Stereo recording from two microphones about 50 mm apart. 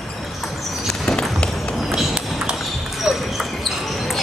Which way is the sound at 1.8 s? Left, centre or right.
Centre.